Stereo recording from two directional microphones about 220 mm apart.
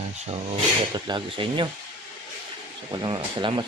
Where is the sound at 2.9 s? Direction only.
20° right (ahead or behind).